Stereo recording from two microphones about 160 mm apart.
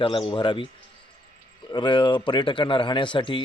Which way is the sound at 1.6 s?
30° left (ahead or behind).